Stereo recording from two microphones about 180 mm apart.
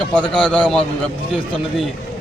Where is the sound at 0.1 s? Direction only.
5° left (ahead or behind).